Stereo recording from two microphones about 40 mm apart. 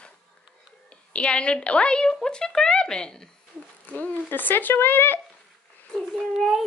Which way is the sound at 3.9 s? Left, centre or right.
Left.